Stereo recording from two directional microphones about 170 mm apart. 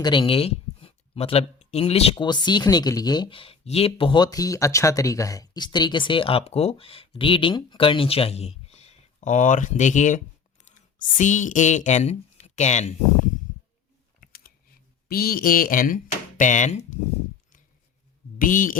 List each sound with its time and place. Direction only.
0.0 s speech: 25° left (ahead or behind); by 13.0 s 45° left (ahead or behind)
14.2 s typing: 60° left (ahead or behind)
15.0 s speech: 60° left (ahead or behind)
18.3 s speech: 55° left (ahead or behind)